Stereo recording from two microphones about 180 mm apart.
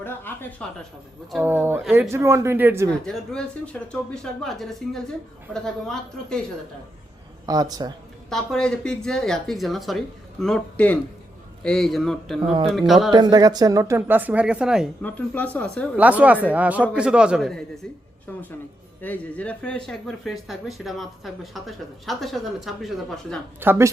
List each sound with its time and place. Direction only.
0.3 s a sound: 10° left (ahead or behind)
1.3 s speech: 10° right (ahead or behind)
3.1 s speech: 5° left (ahead or behind)
7.4 s speech: 20° right (ahead or behind)
8.3 s a man's voice: 5° left (ahead or behind)
13.1 s speech: 25° right (ahead or behind); by 14.8 s 5° right (ahead or behind)
15.0 s a man's voice: 10° left (ahead or behind)
16.0 s speech: 10° right (ahead or behind)
19.0 s speech: 10° left (ahead or behind)
23.6 s speech: 15° right (ahead or behind)